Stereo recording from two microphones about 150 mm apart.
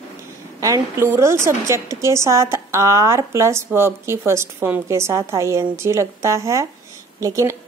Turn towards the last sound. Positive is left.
turn(degrees=-20)  # may be behind; listen again after turning